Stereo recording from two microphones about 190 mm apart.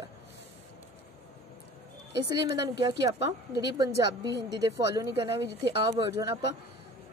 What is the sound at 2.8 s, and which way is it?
A woman's voice, 25° right (ahead or behind).